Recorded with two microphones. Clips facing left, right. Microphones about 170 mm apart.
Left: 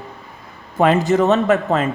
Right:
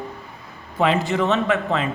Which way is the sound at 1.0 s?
40° left (ahead or behind).